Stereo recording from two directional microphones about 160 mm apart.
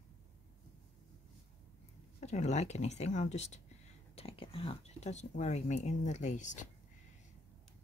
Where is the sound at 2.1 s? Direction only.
45° left (ahead or behind).